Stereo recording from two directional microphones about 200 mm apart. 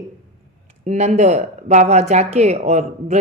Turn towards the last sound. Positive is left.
turn(degrees=-35)  # may be behind; listen again after turning